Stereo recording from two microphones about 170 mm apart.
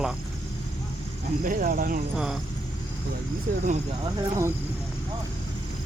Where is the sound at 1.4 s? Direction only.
55° right (ahead or behind).